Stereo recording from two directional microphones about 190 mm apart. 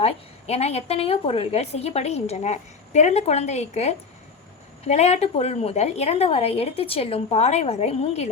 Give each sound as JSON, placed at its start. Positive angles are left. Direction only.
{"t": 0.0, "sound": "a woman's voice", "side_deg": 35}